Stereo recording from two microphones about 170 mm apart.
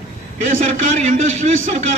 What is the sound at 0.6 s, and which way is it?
Speech, 45° right (ahead or behind).